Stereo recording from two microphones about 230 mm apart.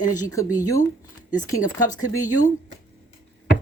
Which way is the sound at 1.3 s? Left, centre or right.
Centre.